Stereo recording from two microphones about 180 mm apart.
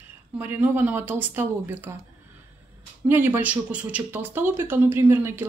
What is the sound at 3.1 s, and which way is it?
Speech, 10° right (ahead or behind).